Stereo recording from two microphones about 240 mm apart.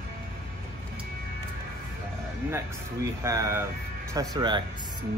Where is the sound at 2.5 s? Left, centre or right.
Centre.